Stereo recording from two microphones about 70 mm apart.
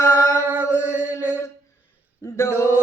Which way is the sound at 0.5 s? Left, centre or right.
Right.